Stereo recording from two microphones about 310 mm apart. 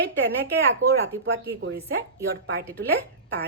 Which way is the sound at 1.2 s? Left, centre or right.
Right.